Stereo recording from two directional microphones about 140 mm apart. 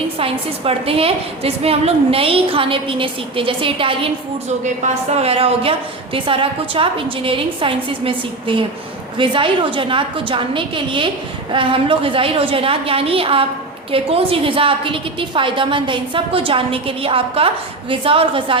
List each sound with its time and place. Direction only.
0.2 s a woman's voice: 40° right (ahead or behind)
5.1 s a woman's voice: 45° right (ahead or behind)